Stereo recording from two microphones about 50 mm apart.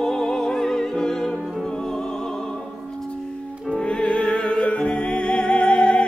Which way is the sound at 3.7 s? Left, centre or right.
Centre.